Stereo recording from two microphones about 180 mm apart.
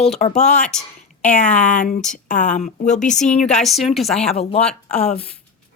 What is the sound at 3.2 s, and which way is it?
A woman's voice, 5° left (ahead or behind).